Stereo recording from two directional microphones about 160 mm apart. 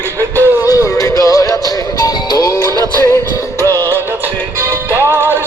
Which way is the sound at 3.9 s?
15° right (ahead or behind).